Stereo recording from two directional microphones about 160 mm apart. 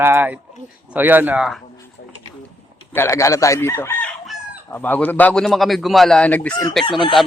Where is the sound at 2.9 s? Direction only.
15° left (ahead or behind).